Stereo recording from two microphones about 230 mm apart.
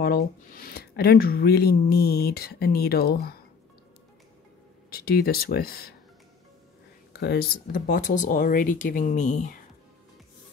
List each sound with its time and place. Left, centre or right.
0.0 s speech: left
4.8 s speech: left
7.1 s speech: left